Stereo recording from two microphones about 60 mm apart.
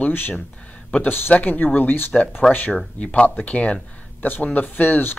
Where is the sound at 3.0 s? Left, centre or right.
Left.